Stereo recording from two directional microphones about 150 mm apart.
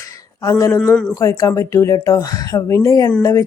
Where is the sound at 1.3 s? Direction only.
20° left (ahead or behind).